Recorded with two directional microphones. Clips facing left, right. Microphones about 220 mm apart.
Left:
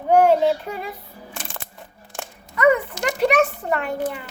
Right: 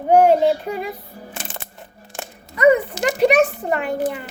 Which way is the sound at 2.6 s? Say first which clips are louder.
Right 3 dB; 20° right (ahead or behind).